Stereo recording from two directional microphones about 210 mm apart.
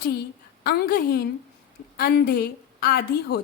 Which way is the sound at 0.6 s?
45° left (ahead or behind).